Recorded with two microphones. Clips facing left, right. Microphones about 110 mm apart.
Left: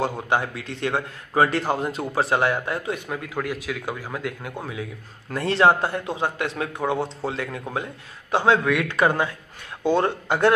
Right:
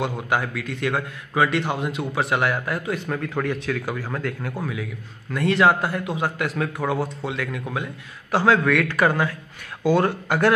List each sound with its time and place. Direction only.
0.0 s a man's voice: 30° left (ahead or behind)
3.1 s a man's voice: 10° left (ahead or behind); by 7.8 s 30° left (ahead or behind)
8.3 s a man's voice: 20° left (ahead or behind)